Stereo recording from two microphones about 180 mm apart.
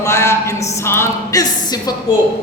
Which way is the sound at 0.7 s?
15° left (ahead or behind).